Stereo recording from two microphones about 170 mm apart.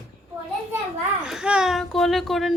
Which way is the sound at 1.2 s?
5° right (ahead or behind).